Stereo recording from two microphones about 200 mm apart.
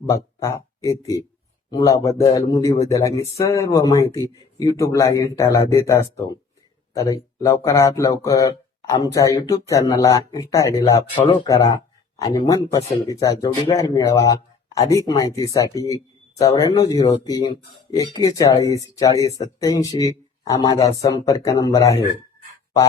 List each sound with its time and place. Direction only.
0.0 s speech: 15° left (ahead or behind)